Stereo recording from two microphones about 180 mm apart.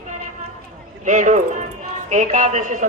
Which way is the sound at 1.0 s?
45° right (ahead or behind).